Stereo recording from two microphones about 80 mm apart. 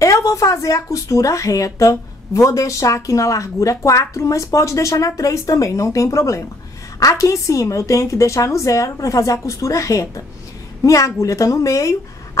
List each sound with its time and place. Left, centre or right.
0.0 s speech: left